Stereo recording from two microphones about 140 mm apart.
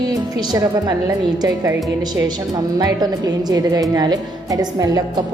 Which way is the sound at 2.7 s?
30° right (ahead or behind).